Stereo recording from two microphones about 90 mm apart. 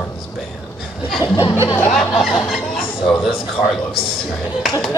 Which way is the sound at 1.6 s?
25° left (ahead or behind).